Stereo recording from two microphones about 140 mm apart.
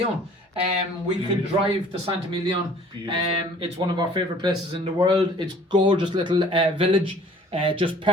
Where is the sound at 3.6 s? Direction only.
30° right (ahead or behind).